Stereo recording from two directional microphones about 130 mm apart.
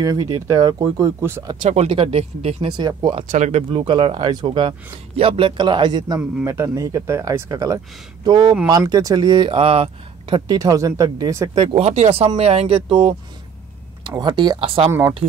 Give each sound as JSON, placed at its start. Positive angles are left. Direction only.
{"t": 0.0, "sound": "speech", "side_deg": -30}
{"t": 1.6, "sound": "speech", "side_deg": -60}
{"t": 2.8, "sound": "speech", "side_deg": -30}
{"t": 3.3, "sound": "speech", "side_deg": -65}
{"t": 3.7, "sound": "speech", "side_deg": -40}
{"t": 11.5, "sound": "speech", "side_deg": -45}
{"t": 14.9, "sound": "speech", "side_deg": -20}